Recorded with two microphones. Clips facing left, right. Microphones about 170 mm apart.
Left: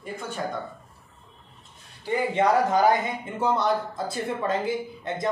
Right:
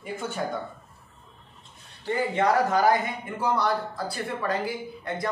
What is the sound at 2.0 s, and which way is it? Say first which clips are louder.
Speech: left 1 dB; 20° left (ahead or behind).